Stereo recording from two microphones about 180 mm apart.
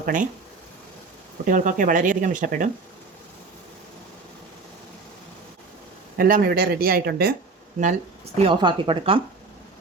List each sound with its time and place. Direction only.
0.0 s speech: 45° right (ahead or behind)
1.5 s speech: 50° right (ahead or behind)
6.1 s speech: 55° right (ahead or behind)
8.4 s speech: 30° right (ahead or behind)